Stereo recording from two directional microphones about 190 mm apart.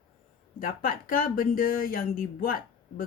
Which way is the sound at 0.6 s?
50° left (ahead or behind).